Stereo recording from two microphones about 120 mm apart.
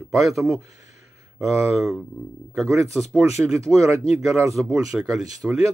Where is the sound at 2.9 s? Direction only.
Centre (ahead or behind).